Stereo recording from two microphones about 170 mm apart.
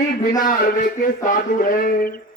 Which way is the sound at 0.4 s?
50° left (ahead or behind).